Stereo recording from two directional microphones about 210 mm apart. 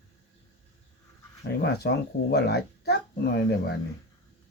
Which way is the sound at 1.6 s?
50° left (ahead or behind).